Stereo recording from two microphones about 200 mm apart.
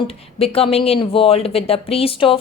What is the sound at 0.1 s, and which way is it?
A woman's voice, 30° left (ahead or behind).